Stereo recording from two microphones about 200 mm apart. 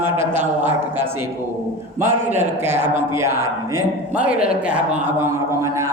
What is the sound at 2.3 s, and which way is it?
Speech, 10° right (ahead or behind).